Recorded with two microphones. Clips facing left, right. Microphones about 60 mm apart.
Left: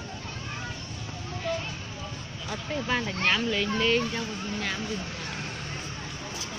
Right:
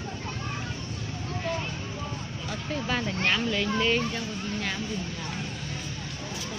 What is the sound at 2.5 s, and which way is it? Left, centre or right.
Speech, centre.